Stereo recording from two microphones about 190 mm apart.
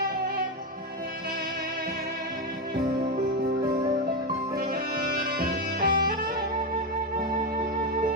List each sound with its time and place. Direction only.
4.5 s music: 50° right (ahead or behind)